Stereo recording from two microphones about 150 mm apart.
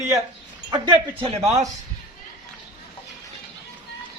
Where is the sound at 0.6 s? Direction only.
30° right (ahead or behind).